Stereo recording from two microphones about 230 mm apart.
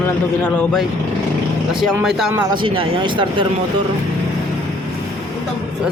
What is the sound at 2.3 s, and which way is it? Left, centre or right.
Speech, centre.